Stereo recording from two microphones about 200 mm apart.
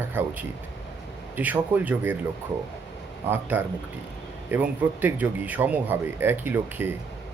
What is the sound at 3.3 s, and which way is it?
Speech, 10° right (ahead or behind).